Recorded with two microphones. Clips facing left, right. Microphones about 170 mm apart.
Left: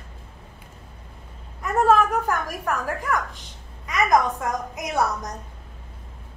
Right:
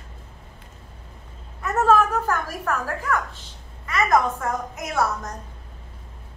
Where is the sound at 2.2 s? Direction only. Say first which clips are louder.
Even; 15° left (ahead or behind).